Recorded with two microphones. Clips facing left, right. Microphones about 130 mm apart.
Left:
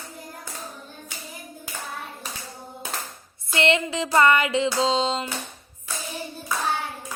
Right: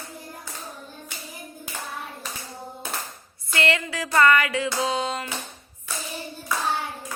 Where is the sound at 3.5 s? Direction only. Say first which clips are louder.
Left 3 dB; 20° left (ahead or behind).